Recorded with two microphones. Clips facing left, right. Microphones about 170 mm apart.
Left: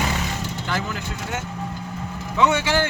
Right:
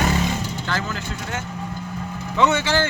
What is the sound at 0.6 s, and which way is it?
Speech, 15° left (ahead or behind).